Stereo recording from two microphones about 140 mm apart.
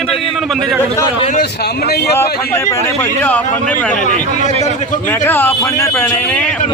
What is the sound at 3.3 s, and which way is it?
Speech, 10° left (ahead or behind).